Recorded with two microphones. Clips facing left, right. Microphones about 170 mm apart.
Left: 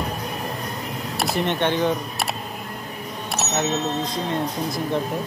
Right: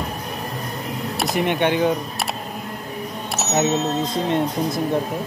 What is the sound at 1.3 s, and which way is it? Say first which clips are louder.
Speech: right 3 dB; 10° right (ahead or behind).